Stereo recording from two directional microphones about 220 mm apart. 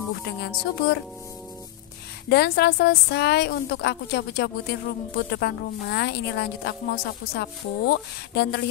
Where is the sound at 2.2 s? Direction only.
45° left (ahead or behind).